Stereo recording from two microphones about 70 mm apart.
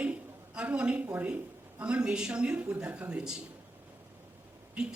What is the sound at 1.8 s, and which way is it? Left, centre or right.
A man's voice, centre.